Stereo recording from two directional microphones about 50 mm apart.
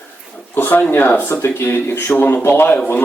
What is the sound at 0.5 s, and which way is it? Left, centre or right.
Speech, left.